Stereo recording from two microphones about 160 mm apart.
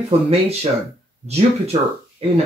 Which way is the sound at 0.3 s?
40° right (ahead or behind).